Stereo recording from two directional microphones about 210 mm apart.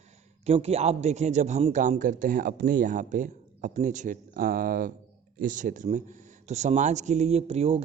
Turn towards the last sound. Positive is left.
turn(degrees=-30)  # may be behind; listen again after turning